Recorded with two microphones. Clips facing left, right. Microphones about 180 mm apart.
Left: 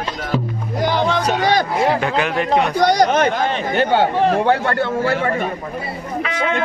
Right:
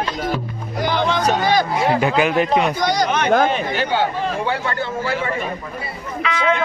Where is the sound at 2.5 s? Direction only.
65° left (ahead or behind).